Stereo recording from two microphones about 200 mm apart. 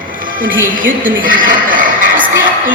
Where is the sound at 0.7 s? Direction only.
45° right (ahead or behind).